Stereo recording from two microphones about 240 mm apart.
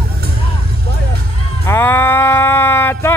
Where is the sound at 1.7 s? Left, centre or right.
Centre.